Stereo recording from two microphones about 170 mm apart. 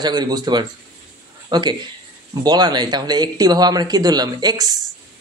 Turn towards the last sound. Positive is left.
turn(degrees=-25)  # may be behind; listen again after turning